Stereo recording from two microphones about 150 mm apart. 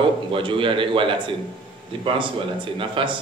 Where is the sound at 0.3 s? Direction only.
35° right (ahead or behind).